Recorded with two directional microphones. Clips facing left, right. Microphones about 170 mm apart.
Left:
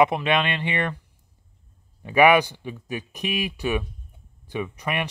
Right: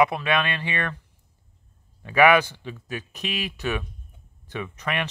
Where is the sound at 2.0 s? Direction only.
15° left (ahead or behind).